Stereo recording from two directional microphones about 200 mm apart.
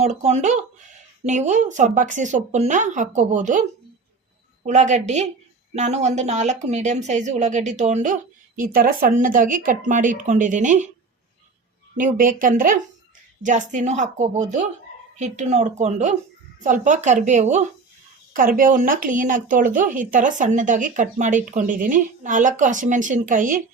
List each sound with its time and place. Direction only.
0.0 s speech: 35° right (ahead or behind)
4.6 s speech: 35° right (ahead or behind)
12.1 s speech: 40° right (ahead or behind)